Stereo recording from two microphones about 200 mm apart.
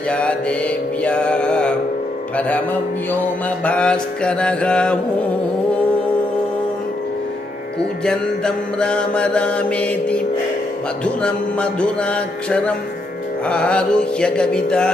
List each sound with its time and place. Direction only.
0.1 s mantra: 5° left (ahead or behind)
3.6 s mantra: 5° left (ahead or behind)
8.0 s mantra: 5° left (ahead or behind)